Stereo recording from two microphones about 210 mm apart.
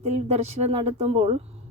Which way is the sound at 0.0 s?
30° right (ahead or behind).